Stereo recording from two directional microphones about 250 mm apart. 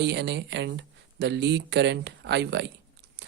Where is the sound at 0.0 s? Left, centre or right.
Right.